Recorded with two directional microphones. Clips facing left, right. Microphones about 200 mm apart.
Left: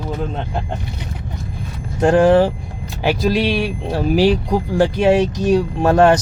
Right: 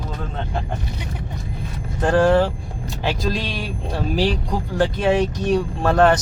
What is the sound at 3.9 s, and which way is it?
Speech, 10° left (ahead or behind).